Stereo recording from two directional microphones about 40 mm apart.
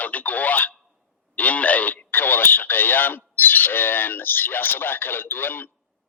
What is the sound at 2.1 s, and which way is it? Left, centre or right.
Speech, left.